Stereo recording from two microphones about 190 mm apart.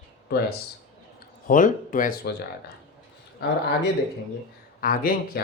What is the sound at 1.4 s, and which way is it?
Speech, 45° left (ahead or behind).